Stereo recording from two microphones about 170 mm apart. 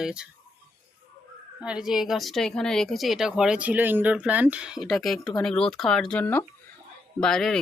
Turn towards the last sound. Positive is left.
turn(degrees=5)  # may be behind; listen again after turning